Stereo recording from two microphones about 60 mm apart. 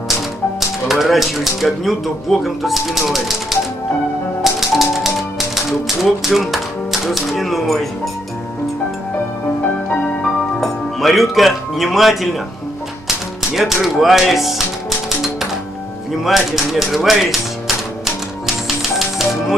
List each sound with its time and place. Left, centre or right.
0.1 s speech: centre
4.4 s music: centre
6.2 s speech: centre
10.2 s music: centre
13.5 s speech: centre
16.3 s speech: centre
18.8 s music: centre